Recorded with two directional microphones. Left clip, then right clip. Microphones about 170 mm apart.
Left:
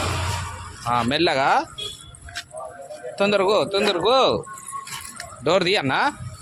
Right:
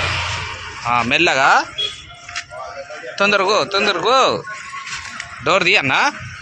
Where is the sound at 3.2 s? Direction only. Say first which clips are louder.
Right 4 dB; 20° left (ahead or behind).